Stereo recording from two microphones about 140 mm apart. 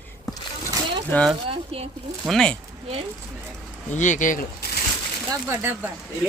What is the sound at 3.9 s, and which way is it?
Speech, 60° left (ahead or behind).